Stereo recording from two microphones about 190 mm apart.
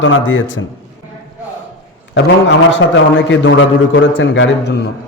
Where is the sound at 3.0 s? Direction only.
80° left.